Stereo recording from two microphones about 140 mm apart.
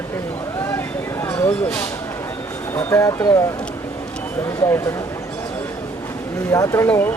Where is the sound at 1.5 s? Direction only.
15° left (ahead or behind).